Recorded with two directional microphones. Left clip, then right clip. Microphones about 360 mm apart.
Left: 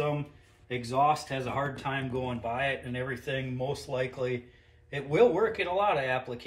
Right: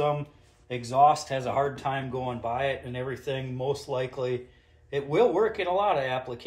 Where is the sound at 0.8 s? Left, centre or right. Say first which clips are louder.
Right 5 dB; centre.